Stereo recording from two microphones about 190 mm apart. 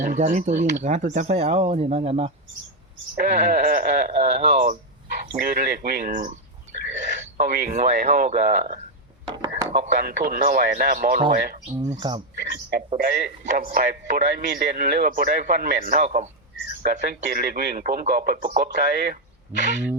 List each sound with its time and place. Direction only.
0.0 s speech: 40° right (ahead or behind)
3.2 s a man's voice: 50° right (ahead or behind)
4.1 s speech: 35° right (ahead or behind)
5.3 s a man's voice: 50° right (ahead or behind)
6.9 s a sound: 40° right (ahead or behind)
7.4 s speech: 40° right (ahead or behind)
9.2 s a sound: 20° right (ahead or behind)
9.7 s a man's voice: 40° right (ahead or behind)
11.9 s speech: 25° right (ahead or behind)
13.0 s a man's voice: 50° right (ahead or behind); by 16.3 s 35° right (ahead or behind)
17.0 s a man's voice: 55° right (ahead or behind)
19.5 s speech: 40° right (ahead or behind)